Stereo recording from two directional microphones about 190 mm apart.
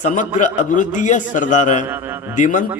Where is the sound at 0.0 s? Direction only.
40° left (ahead or behind).